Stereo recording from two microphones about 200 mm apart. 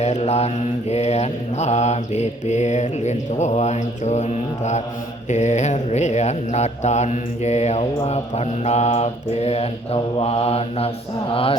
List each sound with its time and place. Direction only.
0.0 s mantra: 35° left (ahead or behind)